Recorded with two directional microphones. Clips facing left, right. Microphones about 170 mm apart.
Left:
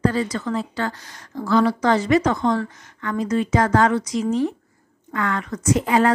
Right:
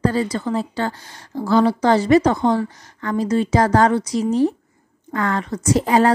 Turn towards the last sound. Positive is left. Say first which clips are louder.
# right 2 dB
turn(degrees=-35)  # may be behind; listen again after turning